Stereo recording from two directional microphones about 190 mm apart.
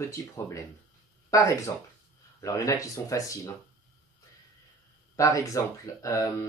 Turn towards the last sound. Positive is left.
turn(degrees=15)  # may be behind; listen again after turning